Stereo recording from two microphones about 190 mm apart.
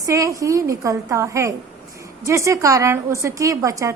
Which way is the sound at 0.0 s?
15° right (ahead or behind).